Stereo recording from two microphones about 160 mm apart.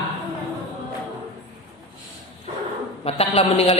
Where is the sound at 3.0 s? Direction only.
40° left (ahead or behind).